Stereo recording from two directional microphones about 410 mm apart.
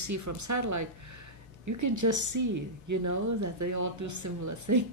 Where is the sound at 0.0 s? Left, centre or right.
Right.